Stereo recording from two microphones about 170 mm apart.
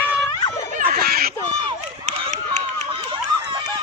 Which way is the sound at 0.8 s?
60° right (ahead or behind).